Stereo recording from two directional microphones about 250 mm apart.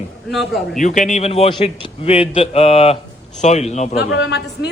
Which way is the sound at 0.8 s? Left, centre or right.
Left.